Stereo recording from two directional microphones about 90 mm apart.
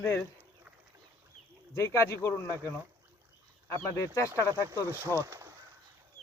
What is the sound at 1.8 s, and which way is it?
Speech, 30° left (ahead or behind).